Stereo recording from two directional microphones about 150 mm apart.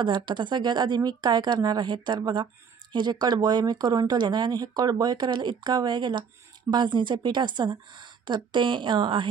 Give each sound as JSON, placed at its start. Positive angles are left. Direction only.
{"t": 0.0, "sound": "a woman's voice", "side_deg": -30}